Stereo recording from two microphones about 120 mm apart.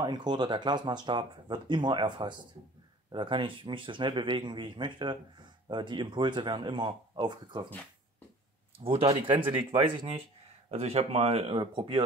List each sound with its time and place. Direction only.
0.0 s speech: 35° right (ahead or behind)
8.7 s speech: 50° right (ahead or behind)
10.7 s speech: 60° right (ahead or behind)
11.5 s speech: 45° right (ahead or behind)